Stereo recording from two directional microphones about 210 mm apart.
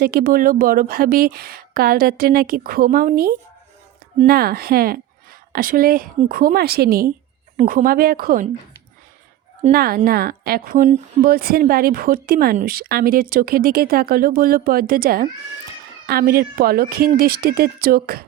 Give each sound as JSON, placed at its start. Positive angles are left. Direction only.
{"t": 0.0, "sound": "a woman's voice", "side_deg": -45}
{"t": 9.7, "sound": "a woman's voice", "side_deg": -45}